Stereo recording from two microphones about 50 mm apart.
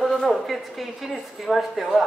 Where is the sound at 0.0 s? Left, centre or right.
Centre.